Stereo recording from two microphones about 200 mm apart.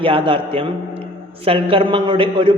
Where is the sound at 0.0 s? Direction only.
25° right (ahead or behind).